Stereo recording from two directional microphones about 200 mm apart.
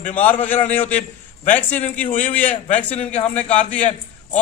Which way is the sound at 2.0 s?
40° left (ahead or behind).